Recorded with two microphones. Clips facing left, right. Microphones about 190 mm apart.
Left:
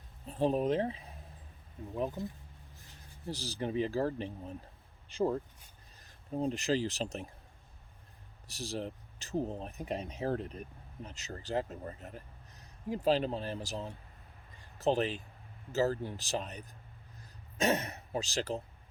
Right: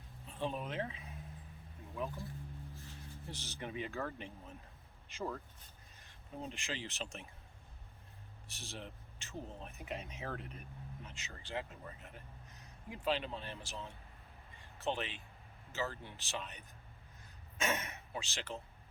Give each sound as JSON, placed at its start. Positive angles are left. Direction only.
{"t": 0.3, "sound": "speech", "side_deg": 40}
{"t": 2.2, "sound": "speech", "side_deg": 20}
{"t": 3.2, "sound": "a man's voice", "side_deg": 35}
{"t": 8.4, "sound": "a man's voice", "side_deg": 35}